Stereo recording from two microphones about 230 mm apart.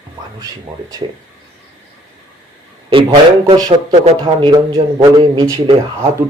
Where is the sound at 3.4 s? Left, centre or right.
Centre.